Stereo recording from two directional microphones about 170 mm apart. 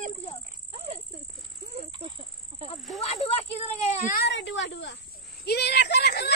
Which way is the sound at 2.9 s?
40° left (ahead or behind).